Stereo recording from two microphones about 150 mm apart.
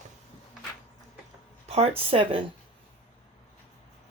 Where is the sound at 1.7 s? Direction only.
45° right (ahead or behind).